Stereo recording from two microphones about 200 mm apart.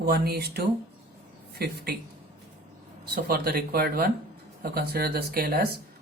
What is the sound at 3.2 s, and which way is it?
Speech, 50° right (ahead or behind).